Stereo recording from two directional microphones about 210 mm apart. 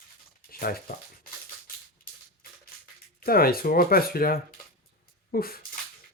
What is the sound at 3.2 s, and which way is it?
Speech, 45° left (ahead or behind).